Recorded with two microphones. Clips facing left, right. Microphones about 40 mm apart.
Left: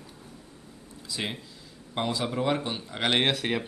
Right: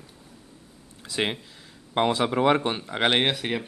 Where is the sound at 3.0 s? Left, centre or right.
Centre.